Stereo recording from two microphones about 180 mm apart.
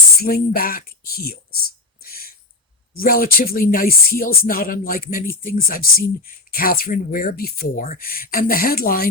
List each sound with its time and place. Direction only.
0.2 s speech: 55° left (ahead or behind)
3.0 s speech: 55° left (ahead or behind)